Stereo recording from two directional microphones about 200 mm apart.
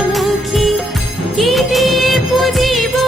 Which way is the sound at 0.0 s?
Centre (ahead or behind).